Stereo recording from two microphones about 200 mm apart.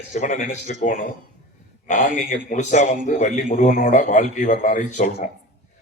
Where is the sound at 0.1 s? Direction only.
40° left (ahead or behind).